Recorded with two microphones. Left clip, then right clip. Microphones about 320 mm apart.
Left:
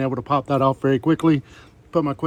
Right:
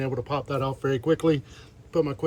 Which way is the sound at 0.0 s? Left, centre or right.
Centre.